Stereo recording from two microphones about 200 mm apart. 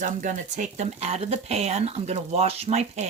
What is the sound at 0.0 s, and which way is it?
Speech, 40° right (ahead or behind).